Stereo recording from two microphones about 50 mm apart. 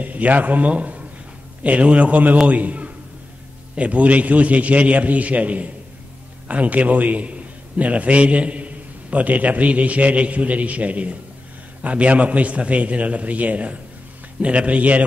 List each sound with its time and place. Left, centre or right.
0.0 s a man's voice: right